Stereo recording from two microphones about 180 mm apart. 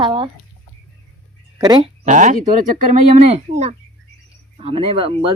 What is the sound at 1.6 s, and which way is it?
Speech, 20° right (ahead or behind).